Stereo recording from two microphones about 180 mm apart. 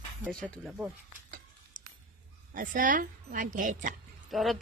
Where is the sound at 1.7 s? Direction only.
45° right (ahead or behind).